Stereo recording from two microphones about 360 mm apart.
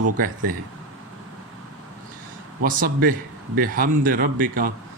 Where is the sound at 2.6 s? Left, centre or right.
Right.